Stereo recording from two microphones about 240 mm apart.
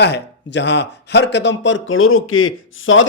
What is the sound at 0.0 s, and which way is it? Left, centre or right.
A man's voice, left.